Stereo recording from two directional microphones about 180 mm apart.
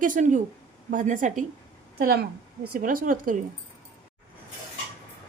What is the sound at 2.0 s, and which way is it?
A woman's voice, 55° right (ahead or behind).